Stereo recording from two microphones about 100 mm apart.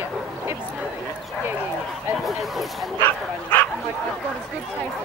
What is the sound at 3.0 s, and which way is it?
Bow-wow, 15° left (ahead or behind).